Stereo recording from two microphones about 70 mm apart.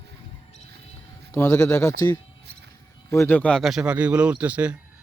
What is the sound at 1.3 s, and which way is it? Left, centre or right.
Speech, left.